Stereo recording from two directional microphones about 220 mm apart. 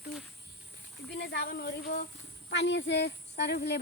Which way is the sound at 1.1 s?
50° left (ahead or behind).